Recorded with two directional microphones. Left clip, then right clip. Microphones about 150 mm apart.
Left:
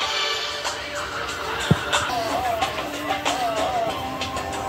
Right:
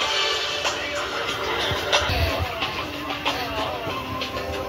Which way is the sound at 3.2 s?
45° left (ahead or behind).